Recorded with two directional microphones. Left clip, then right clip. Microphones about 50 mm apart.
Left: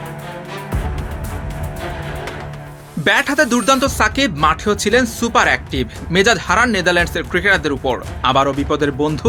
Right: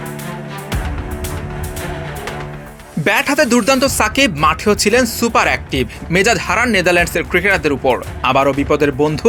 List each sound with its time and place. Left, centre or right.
3.0 s speech: right